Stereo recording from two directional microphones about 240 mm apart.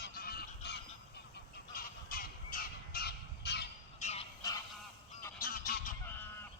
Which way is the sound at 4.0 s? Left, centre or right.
Left.